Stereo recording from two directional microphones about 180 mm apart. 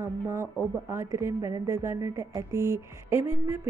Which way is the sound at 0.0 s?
15° right (ahead or behind).